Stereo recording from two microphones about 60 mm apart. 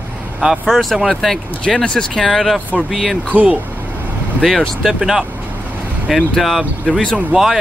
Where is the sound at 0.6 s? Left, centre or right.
Centre.